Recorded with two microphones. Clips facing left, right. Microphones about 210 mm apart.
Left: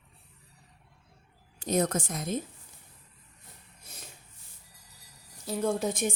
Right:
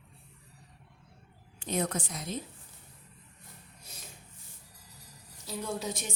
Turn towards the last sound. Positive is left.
turn(degrees=50)  # may be behind; listen again after turning